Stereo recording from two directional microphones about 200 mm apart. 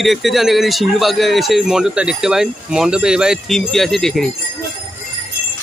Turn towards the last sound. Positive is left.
turn(degrees=0)  # may be behind; listen again after turning